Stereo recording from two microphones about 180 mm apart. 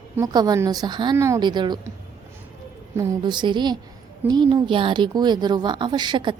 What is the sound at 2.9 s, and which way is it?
A woman's voice, 20° right (ahead or behind).